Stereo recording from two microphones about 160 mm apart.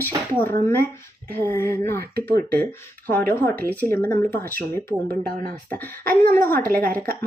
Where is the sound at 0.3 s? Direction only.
15° left (ahead or behind).